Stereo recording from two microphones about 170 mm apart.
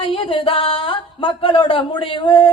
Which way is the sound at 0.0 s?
30° left (ahead or behind).